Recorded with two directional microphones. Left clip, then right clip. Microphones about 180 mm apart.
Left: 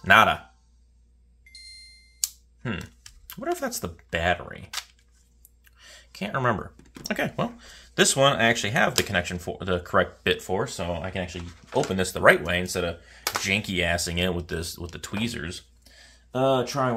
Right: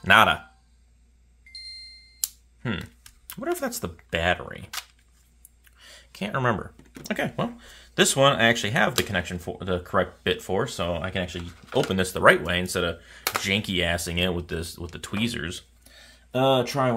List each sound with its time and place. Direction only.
0.0 s speech: 10° right (ahead or behind)
1.5 s a sound: 5° right (ahead or behind)
5.7 s speech: 5° right (ahead or behind)
10.4 s speech: 15° right (ahead or behind)
13.4 s speech: 10° right (ahead or behind)